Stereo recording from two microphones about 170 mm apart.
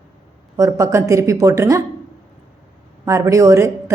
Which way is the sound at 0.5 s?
20° right (ahead or behind).